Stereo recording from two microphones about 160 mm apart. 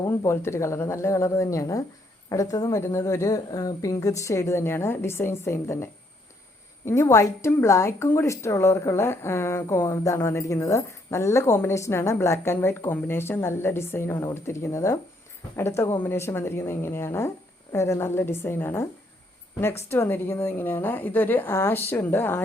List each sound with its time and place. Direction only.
0.2 s a woman's voice: 15° left (ahead or behind)